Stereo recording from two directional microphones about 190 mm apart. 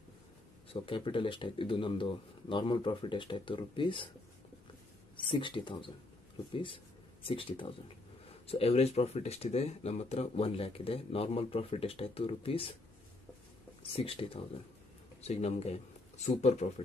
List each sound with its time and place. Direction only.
0.8 s speech: 25° left (ahead or behind)
5.1 s speech: 25° left (ahead or behind)
13.8 s speech: 30° left (ahead or behind)